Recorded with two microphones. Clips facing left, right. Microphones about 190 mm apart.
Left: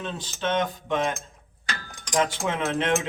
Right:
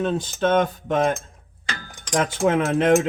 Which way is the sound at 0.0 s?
45° right (ahead or behind).